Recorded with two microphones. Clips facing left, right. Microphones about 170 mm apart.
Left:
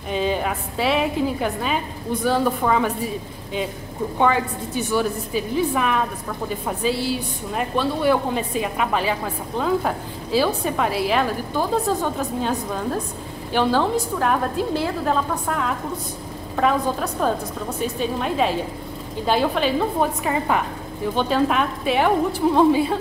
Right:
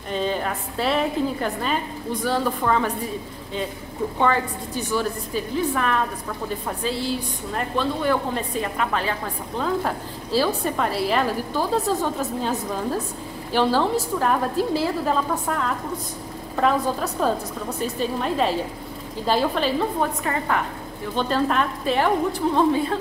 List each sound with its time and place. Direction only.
0.1 s a woman's voice: 10° left (ahead or behind)
4.9 s a woman's voice: 10° left (ahead or behind)
9.6 s a woman's voice: centre (ahead or behind)
20.2 s a woman's voice: 15° left (ahead or behind)